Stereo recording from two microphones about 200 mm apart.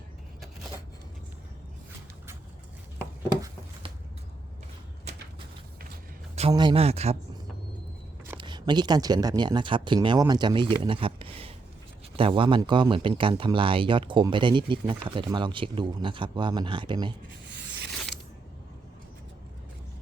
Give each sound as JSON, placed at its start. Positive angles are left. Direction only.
{"t": 6.5, "sound": "speech", "side_deg": -20}
{"t": 8.4, "sound": "speech", "side_deg": -25}